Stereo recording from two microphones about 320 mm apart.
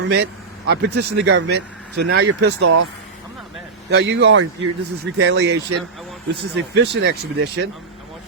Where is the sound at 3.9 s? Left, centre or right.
Right.